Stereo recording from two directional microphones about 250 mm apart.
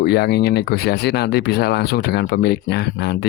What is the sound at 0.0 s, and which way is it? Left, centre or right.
Speech, left.